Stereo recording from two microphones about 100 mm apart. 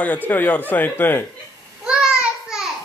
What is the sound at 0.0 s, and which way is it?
Speech, 15° left (ahead or behind).